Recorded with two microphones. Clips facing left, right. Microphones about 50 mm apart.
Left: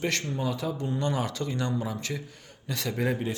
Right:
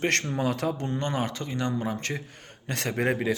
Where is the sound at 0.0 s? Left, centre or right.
Right.